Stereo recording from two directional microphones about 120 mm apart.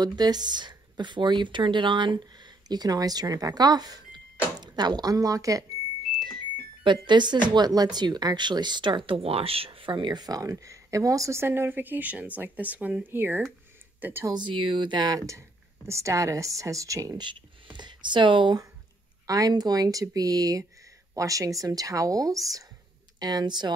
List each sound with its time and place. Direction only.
0.0 s speech: 35° right (ahead or behind)
6.3 s cash register: 40° right (ahead or behind)
7.4 s speech: 35° right (ahead or behind); by 14.3 s 20° right (ahead or behind)
14.3 s speech: 40° right (ahead or behind)
17.7 s speech: 40° right (ahead or behind)